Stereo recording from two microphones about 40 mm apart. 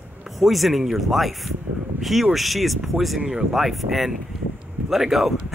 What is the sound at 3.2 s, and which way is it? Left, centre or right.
Speech, right.